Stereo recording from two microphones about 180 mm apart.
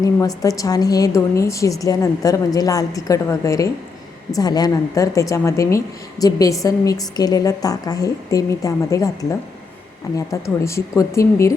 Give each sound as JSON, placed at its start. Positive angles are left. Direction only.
{"t": 0.0, "sound": "speech", "side_deg": 20}